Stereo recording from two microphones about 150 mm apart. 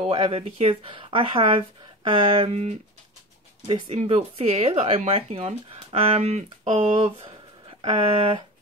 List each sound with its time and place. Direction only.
0.1 s speech: 35° right (ahead or behind)